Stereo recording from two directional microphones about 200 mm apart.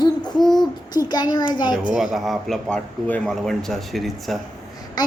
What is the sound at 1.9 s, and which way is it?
A man's voice, centre (ahead or behind).